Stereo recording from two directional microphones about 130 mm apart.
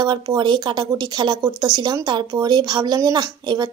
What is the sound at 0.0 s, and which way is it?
Speech, 35° right (ahead or behind).